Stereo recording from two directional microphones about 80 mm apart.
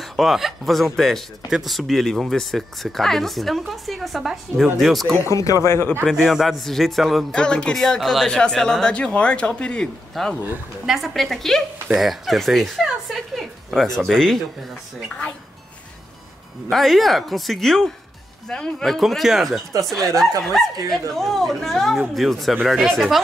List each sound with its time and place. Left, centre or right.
0.0 s a man's voice: centre
5.2 s speech: left
6.0 s a man's voice: centre
7.3 s speech: centre
10.1 s a man's voice: centre
16.6 s a man's voice: centre